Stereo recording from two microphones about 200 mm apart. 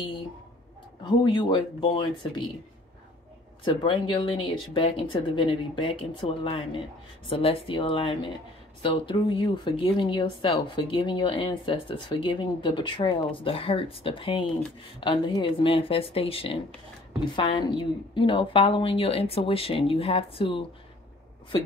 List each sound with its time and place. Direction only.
1.0 s speech: 25° left (ahead or behind)
3.6 s speech: 25° left (ahead or behind)